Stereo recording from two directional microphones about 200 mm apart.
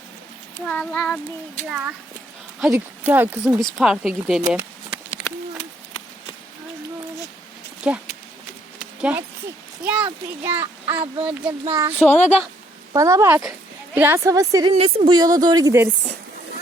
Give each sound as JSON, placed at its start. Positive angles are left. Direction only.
{"t": 0.6, "sound": "a child's voice", "side_deg": 5}
{"t": 4.4, "sound": "a sound", "side_deg": -10}
{"t": 7.9, "sound": "a child's voice", "side_deg": -5}
{"t": 11.6, "sound": "a woman's voice", "side_deg": -25}
{"t": 14.7, "sound": "a woman's voice", "side_deg": -30}